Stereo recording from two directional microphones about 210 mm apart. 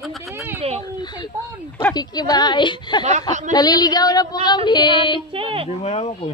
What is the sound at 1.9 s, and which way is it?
A woman's voice, 20° left (ahead or behind).